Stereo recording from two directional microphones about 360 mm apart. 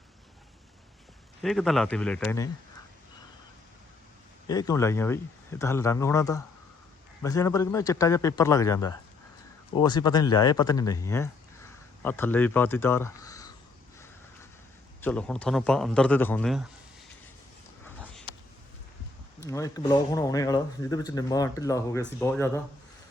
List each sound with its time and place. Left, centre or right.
1.4 s a man's voice: centre
4.4 s speech: centre
15.0 s a man's voice: centre
17.8 s dog: centre
19.5 s speech: centre